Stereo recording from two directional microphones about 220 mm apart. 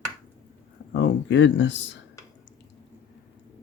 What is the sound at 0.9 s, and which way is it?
Speech, 55° left (ahead or behind).